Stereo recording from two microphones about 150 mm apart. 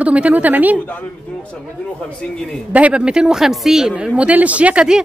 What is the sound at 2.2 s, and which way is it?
Speech, 5° left (ahead or behind).